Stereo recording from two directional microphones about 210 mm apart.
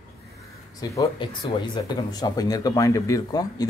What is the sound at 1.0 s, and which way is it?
Speech, 20° left (ahead or behind).